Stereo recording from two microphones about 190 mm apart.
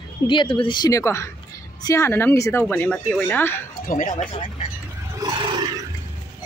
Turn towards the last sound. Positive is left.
turn(degrees=-20)  # may be behind; listen again after turning